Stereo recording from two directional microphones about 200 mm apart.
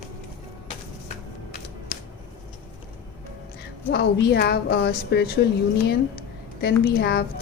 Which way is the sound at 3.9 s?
55° left (ahead or behind).